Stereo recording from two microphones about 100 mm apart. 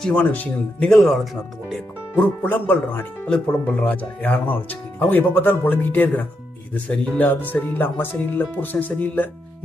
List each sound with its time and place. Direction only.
0.0 s speech: 15° left (ahead or behind)
2.1 s speech: 15° left (ahead or behind)